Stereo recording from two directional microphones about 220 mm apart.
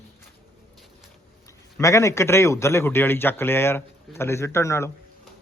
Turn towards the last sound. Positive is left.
turn(degrees=15)  # may be behind; listen again after turning